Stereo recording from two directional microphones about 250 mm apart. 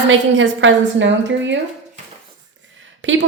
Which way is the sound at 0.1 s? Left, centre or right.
Right.